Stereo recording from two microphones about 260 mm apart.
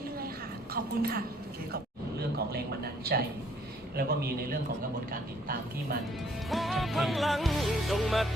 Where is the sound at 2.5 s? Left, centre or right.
Right.